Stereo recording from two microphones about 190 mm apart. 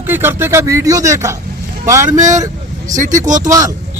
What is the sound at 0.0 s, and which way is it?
Speech, 10° right (ahead or behind).